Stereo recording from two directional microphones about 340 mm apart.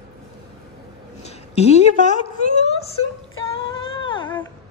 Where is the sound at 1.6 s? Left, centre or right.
Centre.